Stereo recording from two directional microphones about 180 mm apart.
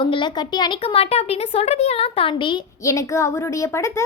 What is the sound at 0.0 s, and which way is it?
A woman's voice, 25° left (ahead or behind).